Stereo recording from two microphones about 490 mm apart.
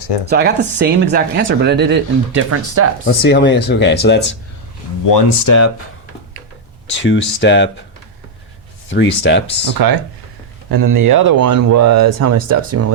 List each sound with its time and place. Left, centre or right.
0.3 s speech: centre
3.1 s speech: left
5.5 s speech: left
6.9 s speech: left
8.9 s speech: left
9.6 s speech: right